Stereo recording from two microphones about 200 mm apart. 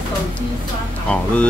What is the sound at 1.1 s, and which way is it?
Speech, 5° left (ahead or behind).